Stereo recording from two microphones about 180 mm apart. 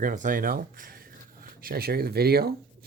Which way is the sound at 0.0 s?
45° right (ahead or behind).